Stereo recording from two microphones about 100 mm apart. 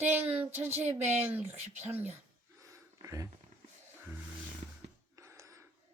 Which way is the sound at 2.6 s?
30° right (ahead or behind).